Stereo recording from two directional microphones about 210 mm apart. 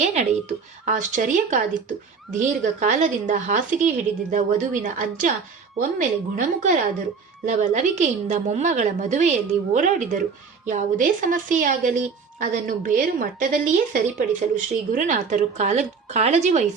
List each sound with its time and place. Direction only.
0.0 s speech: 35° right (ahead or behind)